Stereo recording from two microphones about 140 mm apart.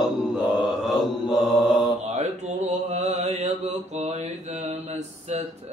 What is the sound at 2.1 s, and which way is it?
Mantra, 50° right (ahead or behind).